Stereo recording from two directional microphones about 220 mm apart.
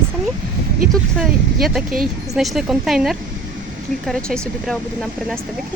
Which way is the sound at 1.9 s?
40° right (ahead or behind).